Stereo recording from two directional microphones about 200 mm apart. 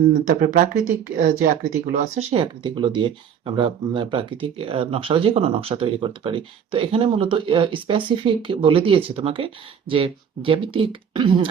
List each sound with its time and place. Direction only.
0.3 s speech: 45° right (ahead or behind)
2.3 s speech: 25° right (ahead or behind)